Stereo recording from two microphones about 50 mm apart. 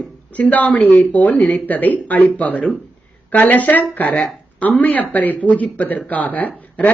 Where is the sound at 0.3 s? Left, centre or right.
Left.